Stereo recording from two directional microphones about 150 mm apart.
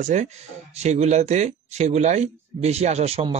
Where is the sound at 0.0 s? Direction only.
50° right (ahead or behind).